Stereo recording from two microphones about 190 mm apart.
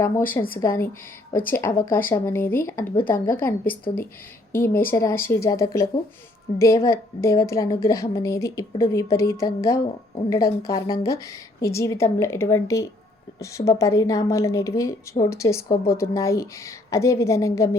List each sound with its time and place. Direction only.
0.0 s a woman's voice: 10° left (ahead or behind)
1.5 s a woman's voice: 10° left (ahead or behind)